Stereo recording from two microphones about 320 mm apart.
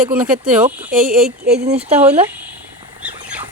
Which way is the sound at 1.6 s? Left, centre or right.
Centre.